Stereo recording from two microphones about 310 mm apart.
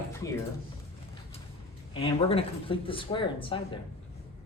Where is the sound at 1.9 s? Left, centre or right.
Centre.